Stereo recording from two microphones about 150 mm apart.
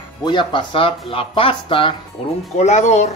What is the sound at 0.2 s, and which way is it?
Speech, 30° left (ahead or behind).